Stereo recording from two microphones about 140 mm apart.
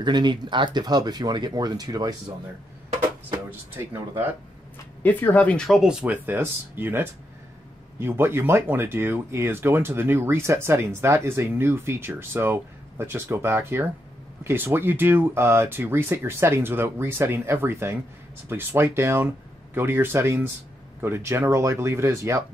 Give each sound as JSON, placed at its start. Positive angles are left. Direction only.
{"t": 0.0, "sound": "speech", "side_deg": -30}
{"t": 5.0, "sound": "speech", "side_deg": 10}